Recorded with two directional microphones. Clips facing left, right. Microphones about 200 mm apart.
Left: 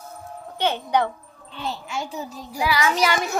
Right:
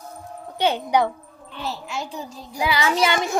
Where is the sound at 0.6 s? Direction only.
15° right (ahead or behind).